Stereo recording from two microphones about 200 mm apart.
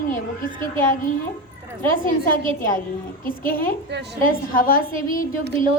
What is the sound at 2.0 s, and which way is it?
Speech, 45° left (ahead or behind).